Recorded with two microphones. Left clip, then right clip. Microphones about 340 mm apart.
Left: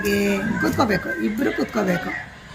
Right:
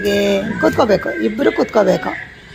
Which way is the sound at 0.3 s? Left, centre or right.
Centre.